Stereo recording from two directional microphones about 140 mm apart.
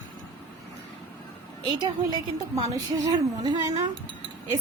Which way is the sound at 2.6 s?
25° right (ahead or behind).